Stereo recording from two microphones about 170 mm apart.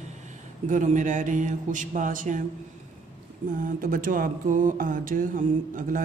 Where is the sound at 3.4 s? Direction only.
50° right (ahead or behind).